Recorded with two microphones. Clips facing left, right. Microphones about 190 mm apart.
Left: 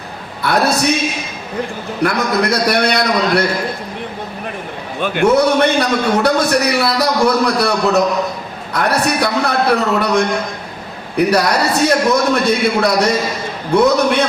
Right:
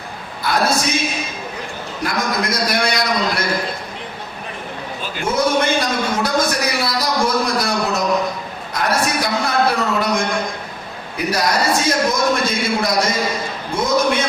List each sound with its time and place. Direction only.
0.4 s a man's voice: 65° left (ahead or behind)
2.0 s a man's voice: 65° left (ahead or behind)
4.9 s a man's voice: 60° left (ahead or behind)